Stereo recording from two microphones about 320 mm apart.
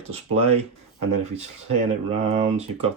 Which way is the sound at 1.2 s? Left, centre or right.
Centre.